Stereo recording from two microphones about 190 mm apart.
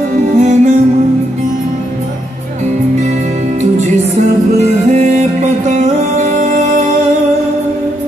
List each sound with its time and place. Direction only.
0.4 s music: 40° right (ahead or behind)
4.6 s music: 40° right (ahead or behind)